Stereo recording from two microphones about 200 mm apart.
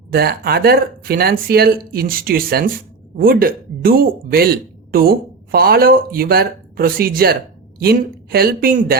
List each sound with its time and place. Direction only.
0.1 s speech: 50° right (ahead or behind)